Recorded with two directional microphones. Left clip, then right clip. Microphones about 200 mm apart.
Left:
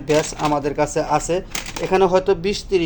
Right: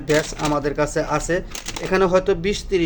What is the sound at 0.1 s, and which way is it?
Speech, centre (ahead or behind).